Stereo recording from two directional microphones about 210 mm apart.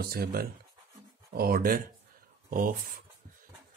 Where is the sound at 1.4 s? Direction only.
45° right (ahead or behind).